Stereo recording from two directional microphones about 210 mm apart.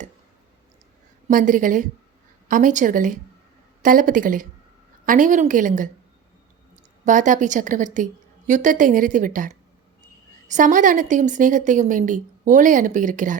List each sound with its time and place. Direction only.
1.3 s a woman's voice: 40° right (ahead or behind)
7.0 s a woman's voice: 35° right (ahead or behind)
10.5 s a woman's voice: 40° right (ahead or behind)